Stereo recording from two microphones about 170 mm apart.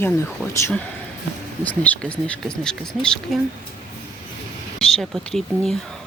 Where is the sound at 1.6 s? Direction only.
10° left (ahead or behind).